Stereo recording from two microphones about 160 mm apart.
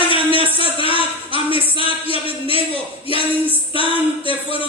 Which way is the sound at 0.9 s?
35° right (ahead or behind).